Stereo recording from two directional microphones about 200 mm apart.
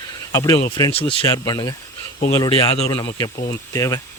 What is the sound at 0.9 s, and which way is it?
Speech, 30° left (ahead or behind).